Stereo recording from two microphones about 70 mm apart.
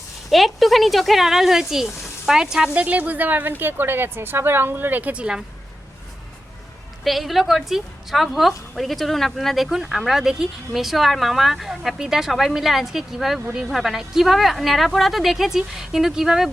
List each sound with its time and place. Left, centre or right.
0.3 s a woman's voice: centre
2.8 s speech: right
7.0 s a woman's voice: centre